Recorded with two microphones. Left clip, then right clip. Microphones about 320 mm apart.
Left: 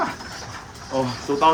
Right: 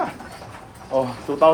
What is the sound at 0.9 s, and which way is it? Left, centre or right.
Speech, centre.